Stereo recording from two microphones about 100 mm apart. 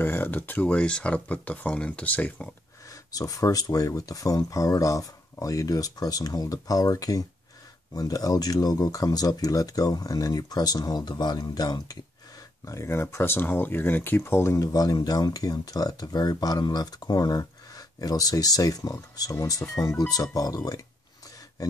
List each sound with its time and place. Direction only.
0.0 s speech: 20° left (ahead or behind)
2.9 s speech: 35° left (ahead or behind)